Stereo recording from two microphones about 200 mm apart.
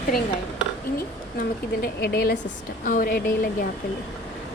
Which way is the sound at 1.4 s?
50° left (ahead or behind).